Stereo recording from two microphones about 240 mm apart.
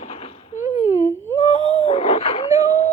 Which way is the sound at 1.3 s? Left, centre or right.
Left.